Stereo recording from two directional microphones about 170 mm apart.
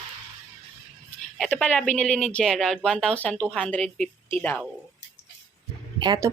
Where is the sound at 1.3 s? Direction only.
10° left (ahead or behind).